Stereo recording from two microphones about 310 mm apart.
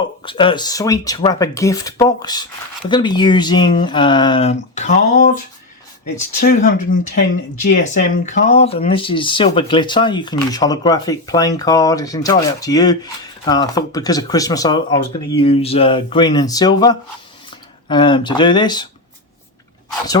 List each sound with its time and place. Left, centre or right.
0.2 s speech: centre
6.4 s speech: left